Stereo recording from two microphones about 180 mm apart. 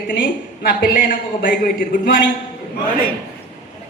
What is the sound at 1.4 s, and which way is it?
Speech, 50° left (ahead or behind).